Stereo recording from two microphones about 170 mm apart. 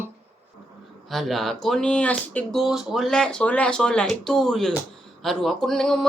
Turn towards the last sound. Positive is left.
turn(degrees=5)  # may be behind; listen again after turning